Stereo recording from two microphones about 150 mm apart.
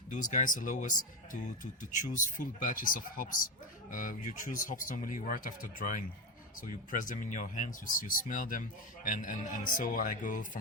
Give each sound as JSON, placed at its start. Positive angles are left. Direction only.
{"t": 0.1, "sound": "speech", "side_deg": 55}